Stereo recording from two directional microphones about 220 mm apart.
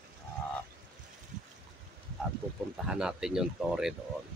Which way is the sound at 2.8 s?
5° right (ahead or behind).